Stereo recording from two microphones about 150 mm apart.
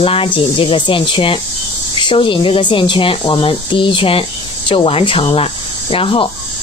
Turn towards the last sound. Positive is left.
turn(degrees=35)  # may be behind; listen again after turning